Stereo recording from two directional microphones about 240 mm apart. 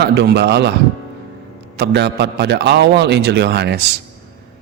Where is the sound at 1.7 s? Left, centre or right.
Right.